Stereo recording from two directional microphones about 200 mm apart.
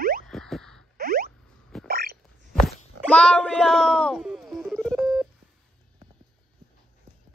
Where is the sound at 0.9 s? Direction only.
50° right (ahead or behind).